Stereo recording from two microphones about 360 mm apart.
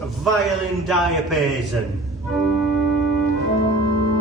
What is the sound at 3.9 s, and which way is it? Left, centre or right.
Music, right.